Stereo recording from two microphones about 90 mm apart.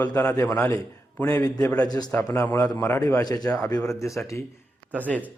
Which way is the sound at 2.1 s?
20° left (ahead or behind).